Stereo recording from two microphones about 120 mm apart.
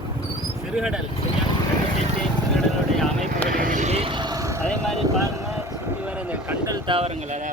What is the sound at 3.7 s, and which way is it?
Vehicle, 80° right.